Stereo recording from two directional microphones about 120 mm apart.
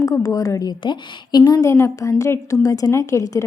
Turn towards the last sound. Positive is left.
turn(degrees=30)  # may be behind; listen again after turning